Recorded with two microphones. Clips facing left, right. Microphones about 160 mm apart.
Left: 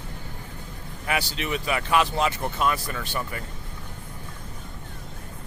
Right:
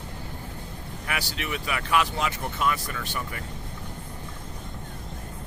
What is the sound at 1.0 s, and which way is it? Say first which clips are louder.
Speech: left 5 dB; 25° left (ahead or behind).